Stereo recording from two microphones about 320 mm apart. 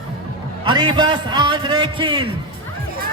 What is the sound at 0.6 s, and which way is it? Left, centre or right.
A man's voice, centre.